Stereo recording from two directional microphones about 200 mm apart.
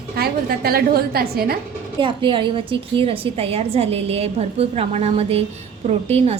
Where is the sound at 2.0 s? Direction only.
25° right (ahead or behind).